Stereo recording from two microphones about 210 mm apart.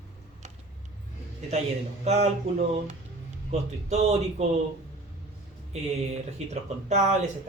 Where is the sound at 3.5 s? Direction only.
30° right (ahead or behind).